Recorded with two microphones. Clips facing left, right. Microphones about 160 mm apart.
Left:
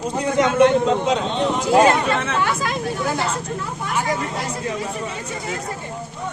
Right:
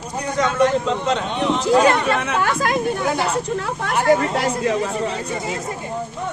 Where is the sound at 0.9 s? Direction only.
5° left (ahead or behind).